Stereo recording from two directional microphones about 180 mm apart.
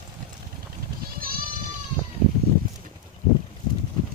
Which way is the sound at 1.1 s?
55° right (ahead or behind).